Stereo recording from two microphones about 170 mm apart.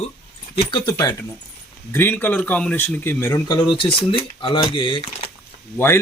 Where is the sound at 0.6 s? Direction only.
30° left (ahead or behind).